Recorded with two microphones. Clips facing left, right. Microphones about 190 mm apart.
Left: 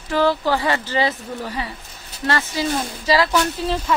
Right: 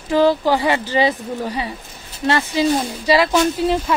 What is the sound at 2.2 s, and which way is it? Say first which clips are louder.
Speech: right 5 dB; 20° right (ahead or behind).